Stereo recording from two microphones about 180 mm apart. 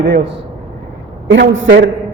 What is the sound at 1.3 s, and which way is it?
Speech, 90° right.